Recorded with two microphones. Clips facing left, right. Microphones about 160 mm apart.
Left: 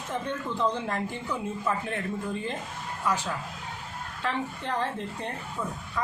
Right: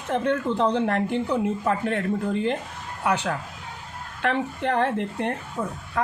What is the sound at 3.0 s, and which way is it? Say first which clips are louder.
A woman's voice: right 5 dB; 70° right (ahead or behind).